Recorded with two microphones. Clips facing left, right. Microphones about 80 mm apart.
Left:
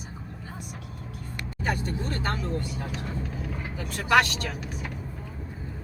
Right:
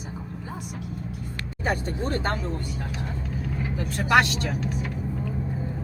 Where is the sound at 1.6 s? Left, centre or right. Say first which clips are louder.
Right 3 dB; right.